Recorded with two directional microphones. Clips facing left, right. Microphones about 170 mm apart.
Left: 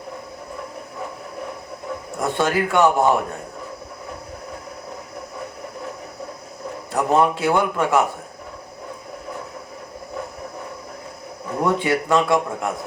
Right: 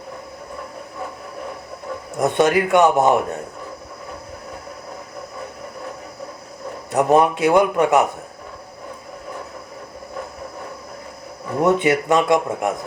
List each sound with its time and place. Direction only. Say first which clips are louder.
2.2 s speech: right 4 dB; 20° right (ahead or behind)
6.9 s a man's voice: right 3 dB; 20° right (ahead or behind)
11.6 s speech: right 4 dB; 20° right (ahead or behind)